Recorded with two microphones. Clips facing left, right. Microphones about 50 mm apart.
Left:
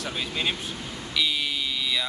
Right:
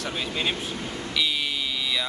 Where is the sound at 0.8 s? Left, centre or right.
Right.